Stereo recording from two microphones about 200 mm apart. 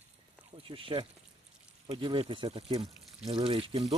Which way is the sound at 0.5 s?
25° right (ahead or behind).